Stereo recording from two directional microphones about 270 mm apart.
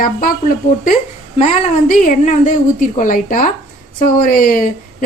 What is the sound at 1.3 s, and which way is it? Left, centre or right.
A woman's voice, left.